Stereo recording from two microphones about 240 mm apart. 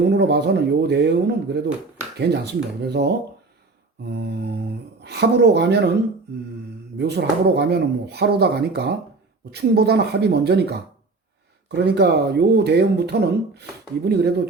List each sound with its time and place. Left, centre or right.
0.0 s speech: right
4.9 s speech: right
7.0 s speech: right